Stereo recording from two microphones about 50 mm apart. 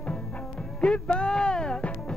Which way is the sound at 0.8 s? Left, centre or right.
Centre.